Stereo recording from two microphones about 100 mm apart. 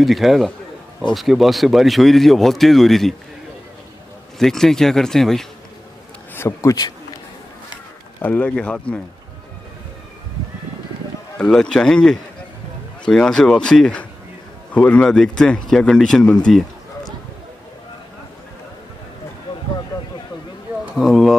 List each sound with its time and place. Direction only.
0.0 s speech: centre (ahead or behind)
4.4 s speech: 5° left (ahead or behind)
6.3 s a man's voice: 25° left (ahead or behind)
8.2 s speech: 15° left (ahead or behind)
11.3 s speech: 10° left (ahead or behind)
20.9 s speech: centre (ahead or behind)